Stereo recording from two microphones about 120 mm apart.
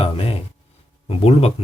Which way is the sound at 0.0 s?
50° left (ahead or behind).